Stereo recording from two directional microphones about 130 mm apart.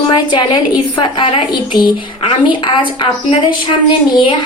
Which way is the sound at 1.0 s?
45° left (ahead or behind).